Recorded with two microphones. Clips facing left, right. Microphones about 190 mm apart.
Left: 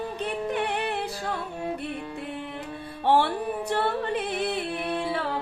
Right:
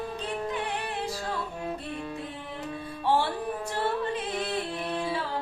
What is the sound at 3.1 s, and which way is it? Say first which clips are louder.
Music: left 4 dB; 65° left (ahead or behind).